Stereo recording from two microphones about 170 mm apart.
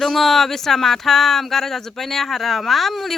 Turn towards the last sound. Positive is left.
turn(degrees=0)  # may be behind; listen again after turning